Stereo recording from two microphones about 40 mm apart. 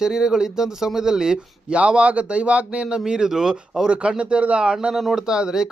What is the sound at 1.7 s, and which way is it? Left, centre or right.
Speech, right.